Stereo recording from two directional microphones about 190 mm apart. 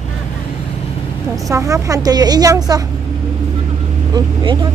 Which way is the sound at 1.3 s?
15° right (ahead or behind).